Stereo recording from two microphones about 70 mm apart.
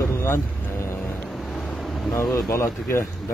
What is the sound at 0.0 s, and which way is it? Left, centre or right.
Music, left.